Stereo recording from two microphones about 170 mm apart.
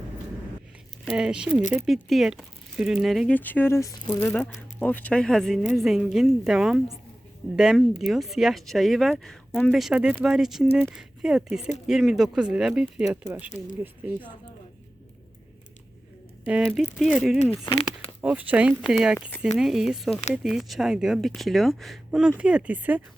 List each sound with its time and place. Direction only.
1.0 s speech: 5° right (ahead or behind)
16.5 s speech: 5° right (ahead or behind)
17.7 s speech: 35° left (ahead or behind)
18.2 s speech: 10° right (ahead or behind)